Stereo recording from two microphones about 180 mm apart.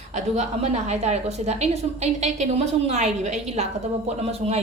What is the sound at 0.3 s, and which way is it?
A woman's voice, 35° right (ahead or behind).